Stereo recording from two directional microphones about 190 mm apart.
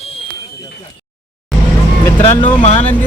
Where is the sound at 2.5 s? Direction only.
35° left (ahead or behind).